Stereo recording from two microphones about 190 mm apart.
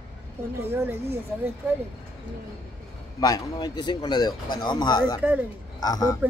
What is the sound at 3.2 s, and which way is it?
Speech, 20° left (ahead or behind).